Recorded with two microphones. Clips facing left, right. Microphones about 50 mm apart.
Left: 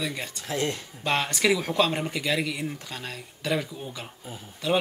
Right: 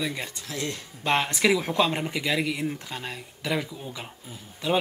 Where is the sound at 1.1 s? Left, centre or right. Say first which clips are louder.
Right 1 dB; centre.